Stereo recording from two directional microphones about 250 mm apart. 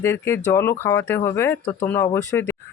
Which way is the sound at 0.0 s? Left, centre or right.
Centre.